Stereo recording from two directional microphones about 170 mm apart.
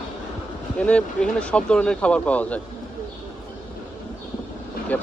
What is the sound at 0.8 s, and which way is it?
Speech, 5° left (ahead or behind).